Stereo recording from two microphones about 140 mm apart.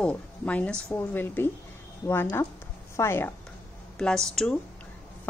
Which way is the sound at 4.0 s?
5° left (ahead or behind).